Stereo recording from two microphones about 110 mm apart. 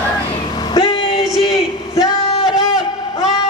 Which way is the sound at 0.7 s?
45° left (ahead or behind).